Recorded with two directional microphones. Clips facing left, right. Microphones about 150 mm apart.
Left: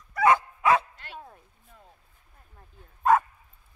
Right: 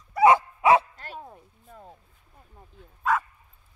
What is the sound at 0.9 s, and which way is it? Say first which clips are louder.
Dog: right 3 dB; 40° right (ahead or behind).